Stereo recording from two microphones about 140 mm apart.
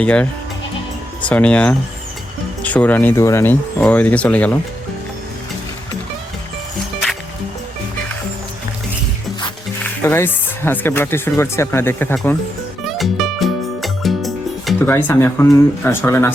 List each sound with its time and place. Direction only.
0.0 s speech: 10° left (ahead or behind)
1.3 s speech: 10° left (ahead or behind)
10.0 s speech: 20° left (ahead or behind)
12.8 s music: centre (ahead or behind)
14.8 s speech: 15° left (ahead or behind)